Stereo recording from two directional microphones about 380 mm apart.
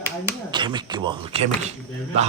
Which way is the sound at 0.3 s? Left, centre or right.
Centre.